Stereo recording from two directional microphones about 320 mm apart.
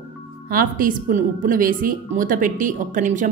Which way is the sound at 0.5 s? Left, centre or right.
Right.